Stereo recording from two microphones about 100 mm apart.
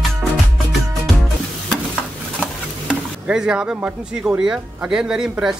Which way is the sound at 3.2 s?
10° right (ahead or behind).